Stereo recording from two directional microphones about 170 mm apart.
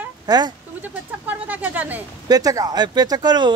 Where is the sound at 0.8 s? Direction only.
10° right (ahead or behind).